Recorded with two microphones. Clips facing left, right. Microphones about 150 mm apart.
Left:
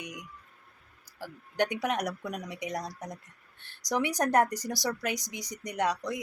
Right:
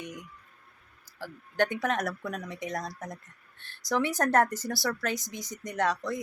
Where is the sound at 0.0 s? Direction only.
15° left (ahead or behind).